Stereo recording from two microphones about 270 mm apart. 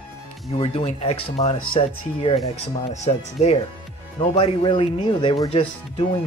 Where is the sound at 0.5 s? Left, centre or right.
Left.